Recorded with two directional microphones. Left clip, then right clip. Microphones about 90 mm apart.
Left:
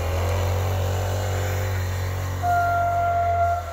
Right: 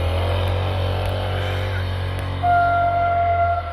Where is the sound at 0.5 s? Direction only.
45° left (ahead or behind).